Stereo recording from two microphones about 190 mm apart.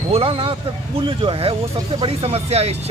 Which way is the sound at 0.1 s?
30° right (ahead or behind).